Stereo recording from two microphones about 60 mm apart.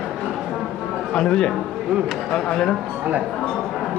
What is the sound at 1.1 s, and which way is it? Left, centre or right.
A man's voice, centre.